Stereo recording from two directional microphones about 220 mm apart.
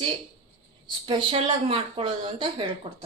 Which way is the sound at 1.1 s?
20° right (ahead or behind).